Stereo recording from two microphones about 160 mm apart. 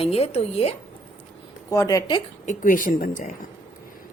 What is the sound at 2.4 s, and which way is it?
Speech, 55° left (ahead or behind).